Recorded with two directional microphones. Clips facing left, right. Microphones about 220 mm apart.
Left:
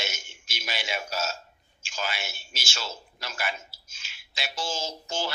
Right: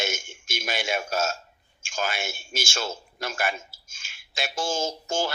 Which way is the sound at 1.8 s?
50° right (ahead or behind).